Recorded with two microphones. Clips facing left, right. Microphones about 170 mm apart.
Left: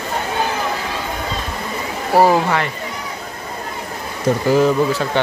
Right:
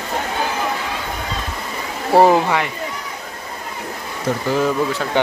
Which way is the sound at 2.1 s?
25° right (ahead or behind).